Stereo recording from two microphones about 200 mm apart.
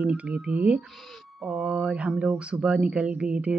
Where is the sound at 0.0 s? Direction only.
5° right (ahead or behind).